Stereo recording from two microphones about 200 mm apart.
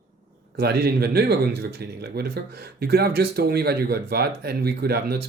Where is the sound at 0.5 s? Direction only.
50° right (ahead or behind).